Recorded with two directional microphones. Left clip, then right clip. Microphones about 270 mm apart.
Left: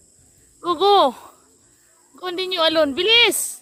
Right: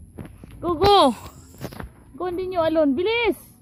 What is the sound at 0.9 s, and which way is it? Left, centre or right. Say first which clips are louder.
Speech: even; centre.